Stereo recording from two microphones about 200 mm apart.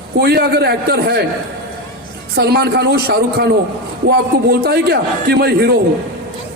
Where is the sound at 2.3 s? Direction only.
50° right (ahead or behind).